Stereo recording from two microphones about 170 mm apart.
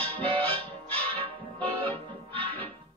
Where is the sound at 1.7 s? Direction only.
35° right (ahead or behind).